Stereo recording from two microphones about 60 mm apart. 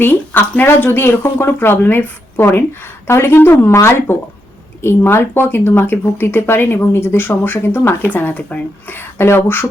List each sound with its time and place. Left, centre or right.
0.0 s speech: left
8.1 s speech: left
8.9 s speech: left